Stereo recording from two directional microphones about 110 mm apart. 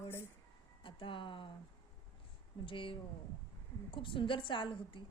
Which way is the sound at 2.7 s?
50° left (ahead or behind).